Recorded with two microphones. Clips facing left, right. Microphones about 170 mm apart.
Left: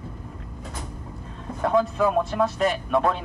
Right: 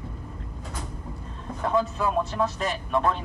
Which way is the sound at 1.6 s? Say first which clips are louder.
Left 4 dB; 55° left (ahead or behind).